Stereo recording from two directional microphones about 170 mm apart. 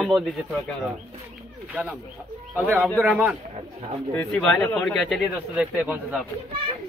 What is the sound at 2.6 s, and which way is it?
Speech, 10° right (ahead or behind).